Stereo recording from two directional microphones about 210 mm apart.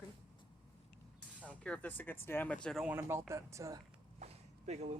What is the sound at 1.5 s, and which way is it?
Speech, 5° left (ahead or behind).